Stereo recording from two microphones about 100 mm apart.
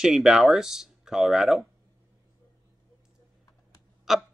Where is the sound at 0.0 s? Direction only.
5° right (ahead or behind).